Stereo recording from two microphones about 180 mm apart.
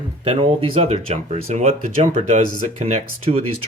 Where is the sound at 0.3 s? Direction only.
30° right (ahead or behind).